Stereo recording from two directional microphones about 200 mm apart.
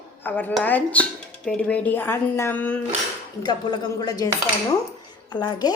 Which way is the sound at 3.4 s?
20° left (ahead or behind).